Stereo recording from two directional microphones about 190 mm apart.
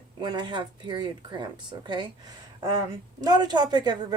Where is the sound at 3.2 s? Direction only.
20° right (ahead or behind).